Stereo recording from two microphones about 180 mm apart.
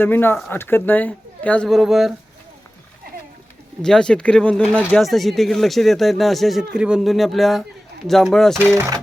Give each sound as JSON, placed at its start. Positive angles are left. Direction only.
{"t": 0.0, "sound": "speech", "side_deg": 10}
{"t": 3.8, "sound": "speech", "side_deg": 5}
{"t": 8.5, "sound": "speech", "side_deg": -15}